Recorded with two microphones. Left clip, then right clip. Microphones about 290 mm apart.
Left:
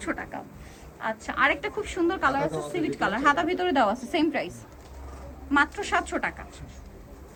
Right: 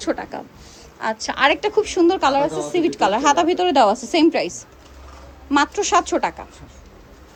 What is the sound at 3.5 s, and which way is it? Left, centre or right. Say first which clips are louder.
Speech: right 8 dB; left.